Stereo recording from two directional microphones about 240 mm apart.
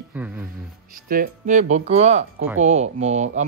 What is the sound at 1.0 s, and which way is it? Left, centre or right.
Speech, right.